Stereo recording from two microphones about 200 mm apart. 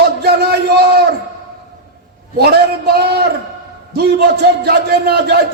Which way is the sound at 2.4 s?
50° right (ahead or behind).